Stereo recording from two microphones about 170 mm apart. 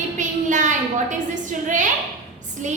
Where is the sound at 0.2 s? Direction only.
45° right (ahead or behind).